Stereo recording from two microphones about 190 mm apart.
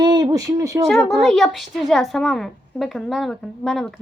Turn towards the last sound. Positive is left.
turn(degrees=0)  # may be behind; listen again after turning